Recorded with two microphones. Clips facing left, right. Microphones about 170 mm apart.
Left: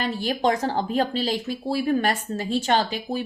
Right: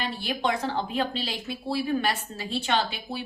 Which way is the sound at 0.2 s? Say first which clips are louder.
Left 5 dB; 45° left (ahead or behind).